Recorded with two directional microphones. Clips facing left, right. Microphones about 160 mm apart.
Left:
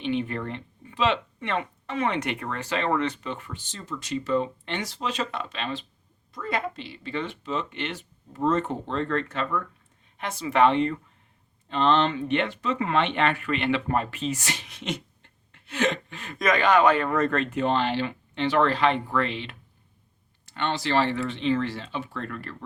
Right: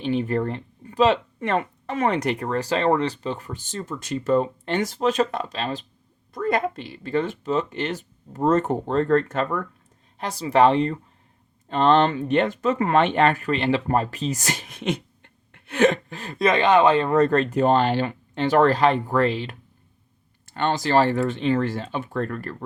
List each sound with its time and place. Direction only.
0.0 s speech: 40° right (ahead or behind)
11.7 s speech: 50° right (ahead or behind)
16.0 s speech: 35° right (ahead or behind)